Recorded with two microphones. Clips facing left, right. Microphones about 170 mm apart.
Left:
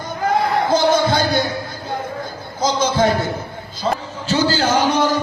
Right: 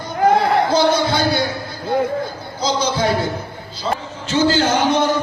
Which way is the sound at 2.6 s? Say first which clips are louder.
Left 2 dB; 45° left (ahead or behind).